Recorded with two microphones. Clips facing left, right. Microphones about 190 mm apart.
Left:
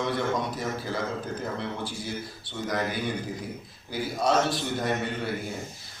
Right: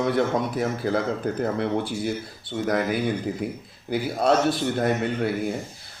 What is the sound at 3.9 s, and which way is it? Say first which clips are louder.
Speech: right 4 dB; 60° right (ahead or behind).